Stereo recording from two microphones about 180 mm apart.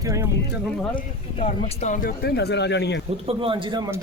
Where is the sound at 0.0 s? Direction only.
15° right (ahead or behind).